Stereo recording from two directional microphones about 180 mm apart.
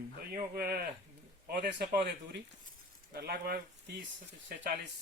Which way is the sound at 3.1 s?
55° right (ahead or behind).